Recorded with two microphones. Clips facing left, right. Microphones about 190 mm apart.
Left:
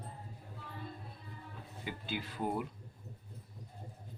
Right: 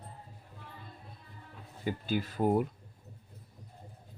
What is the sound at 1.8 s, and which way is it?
Speech, 45° right (ahead or behind).